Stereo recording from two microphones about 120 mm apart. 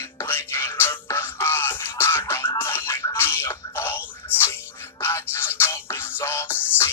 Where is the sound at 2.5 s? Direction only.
20° left (ahead or behind).